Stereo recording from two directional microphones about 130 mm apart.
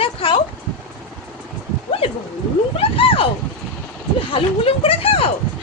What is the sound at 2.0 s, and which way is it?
A woman's voice, 45° left (ahead or behind).